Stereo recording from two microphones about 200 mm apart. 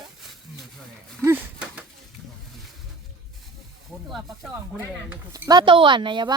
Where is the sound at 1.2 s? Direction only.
10° right (ahead or behind).